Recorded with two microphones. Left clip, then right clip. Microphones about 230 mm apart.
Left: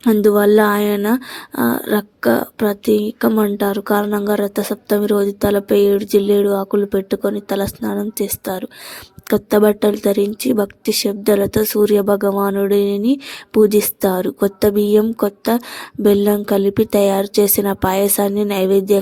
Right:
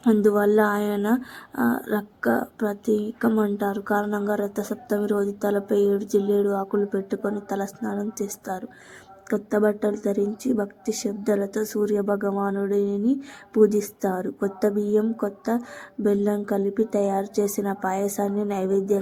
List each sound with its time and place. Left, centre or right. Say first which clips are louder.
0.2 s speech: left 9 dB; left
11.3 s speech: left 9 dB; left
11.5 s speech: left 10 dB; left
17.6 s speech: left 9 dB; left